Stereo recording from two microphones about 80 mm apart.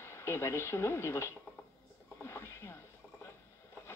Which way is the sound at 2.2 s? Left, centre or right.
Left.